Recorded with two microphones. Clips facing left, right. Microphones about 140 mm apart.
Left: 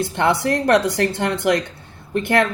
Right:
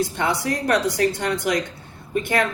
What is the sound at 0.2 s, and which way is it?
Speech, 60° left (ahead or behind).